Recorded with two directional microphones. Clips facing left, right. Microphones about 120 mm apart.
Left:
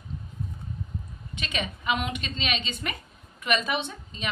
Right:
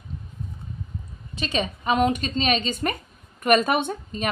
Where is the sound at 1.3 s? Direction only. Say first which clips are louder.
Right 6 dB; 35° right (ahead or behind).